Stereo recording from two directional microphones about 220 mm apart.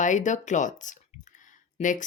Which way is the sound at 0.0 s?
35° left (ahead or behind).